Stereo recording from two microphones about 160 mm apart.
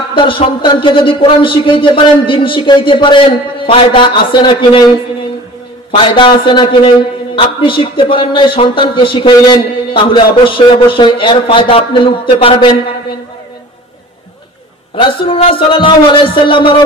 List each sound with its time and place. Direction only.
0.1 s speech: 30° left (ahead or behind)
15.2 s speech: 35° left (ahead or behind)